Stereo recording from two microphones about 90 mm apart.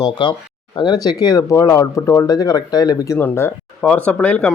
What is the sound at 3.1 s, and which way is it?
Speech, 25° left (ahead or behind).